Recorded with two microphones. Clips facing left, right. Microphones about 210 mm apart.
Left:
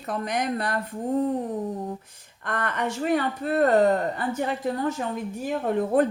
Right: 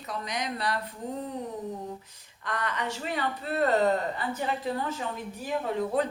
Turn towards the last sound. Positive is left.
turn(degrees=50)  # may be behind; listen again after turning